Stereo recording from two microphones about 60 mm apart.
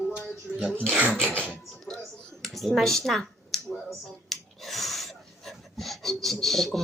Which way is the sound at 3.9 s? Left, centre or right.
Centre.